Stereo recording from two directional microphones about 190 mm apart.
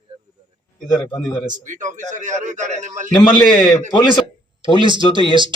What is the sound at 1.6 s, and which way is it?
A man's voice, 40° right (ahead or behind).